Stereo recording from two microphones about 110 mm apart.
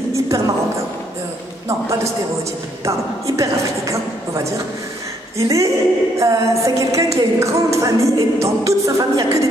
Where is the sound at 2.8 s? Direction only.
30° right (ahead or behind).